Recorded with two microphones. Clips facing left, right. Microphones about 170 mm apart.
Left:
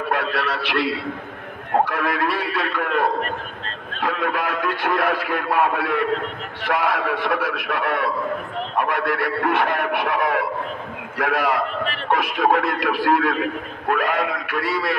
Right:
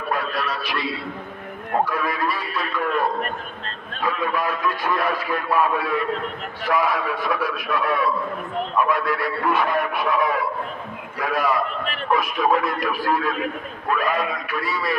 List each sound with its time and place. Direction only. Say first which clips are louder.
0.1 s a man's voice: left 1 dB; 70° left (ahead or behind)